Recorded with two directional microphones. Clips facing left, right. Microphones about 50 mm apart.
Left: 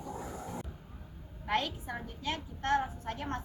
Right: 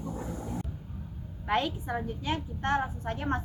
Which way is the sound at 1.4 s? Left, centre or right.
Centre.